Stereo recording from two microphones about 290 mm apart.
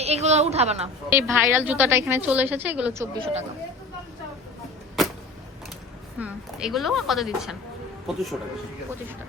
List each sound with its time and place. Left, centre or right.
0.0 s a woman's voice: right
1.1 s a woman's voice: centre
6.1 s a woman's voice: centre